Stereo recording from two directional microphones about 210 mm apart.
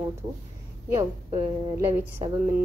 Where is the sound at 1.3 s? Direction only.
25° right (ahead or behind).